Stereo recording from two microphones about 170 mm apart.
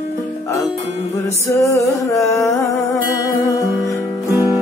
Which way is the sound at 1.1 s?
15° left (ahead or behind).